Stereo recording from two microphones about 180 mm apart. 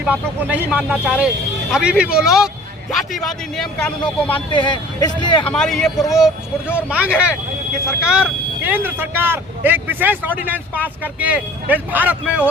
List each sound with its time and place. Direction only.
0.0 s speech: 10° right (ahead or behind)
4.4 s speech: 25° left (ahead or behind)
5.5 s speech: centre (ahead or behind)